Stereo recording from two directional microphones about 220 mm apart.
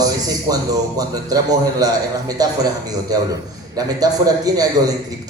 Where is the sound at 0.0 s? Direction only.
15° right (ahead or behind).